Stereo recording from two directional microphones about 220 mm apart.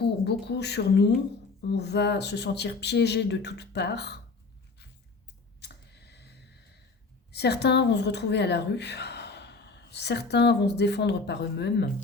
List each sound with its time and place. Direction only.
0.0 s speech: 50° left (ahead or behind)
5.5 s a sound: 50° left (ahead or behind)
7.3 s a woman's voice: 50° left (ahead or behind)